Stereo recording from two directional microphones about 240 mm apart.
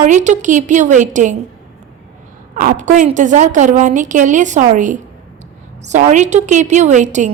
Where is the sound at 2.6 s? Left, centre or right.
Right.